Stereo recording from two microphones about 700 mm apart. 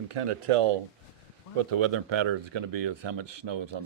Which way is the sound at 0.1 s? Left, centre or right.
Right.